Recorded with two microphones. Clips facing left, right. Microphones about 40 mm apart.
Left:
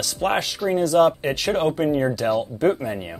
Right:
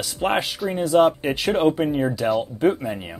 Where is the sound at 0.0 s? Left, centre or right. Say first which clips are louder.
Even; centre.